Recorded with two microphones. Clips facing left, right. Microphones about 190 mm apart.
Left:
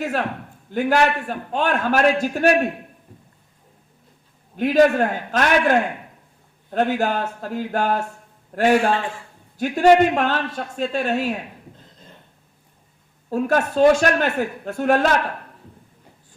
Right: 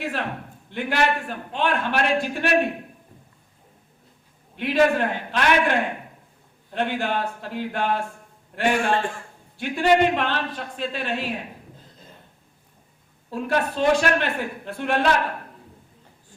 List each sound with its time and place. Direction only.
0.0 s a man's voice: 45° left (ahead or behind)
4.5 s a man's voice: 45° left (ahead or behind)
13.3 s a man's voice: 45° left (ahead or behind)